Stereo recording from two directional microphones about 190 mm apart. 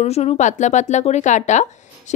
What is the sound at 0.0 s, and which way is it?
Speech, 35° left (ahead or behind).